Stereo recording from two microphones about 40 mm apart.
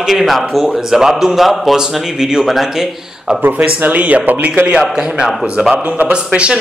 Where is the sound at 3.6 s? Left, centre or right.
Right.